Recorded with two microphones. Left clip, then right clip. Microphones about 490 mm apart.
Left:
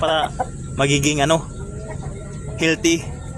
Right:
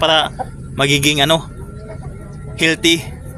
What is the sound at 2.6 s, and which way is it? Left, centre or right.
Speech, right.